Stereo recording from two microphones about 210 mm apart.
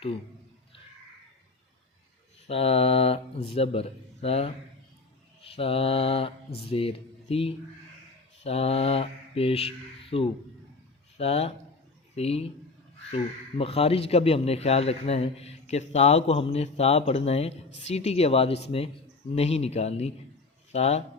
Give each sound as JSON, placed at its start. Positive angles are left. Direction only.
{"t": 2.5, "sound": "a man's voice", "side_deg": 30}
{"t": 8.4, "sound": "mantra", "side_deg": 30}
{"t": 11.2, "sound": "a man's voice", "side_deg": 30}